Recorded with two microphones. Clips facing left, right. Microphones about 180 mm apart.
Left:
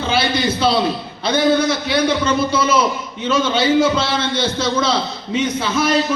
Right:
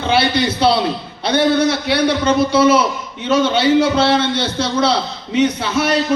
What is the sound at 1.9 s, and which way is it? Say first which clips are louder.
Speech: right 2 dB; 65° right (ahead or behind).